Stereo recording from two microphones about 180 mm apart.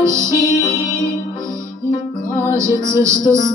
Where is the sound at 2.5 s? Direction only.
15° right (ahead or behind).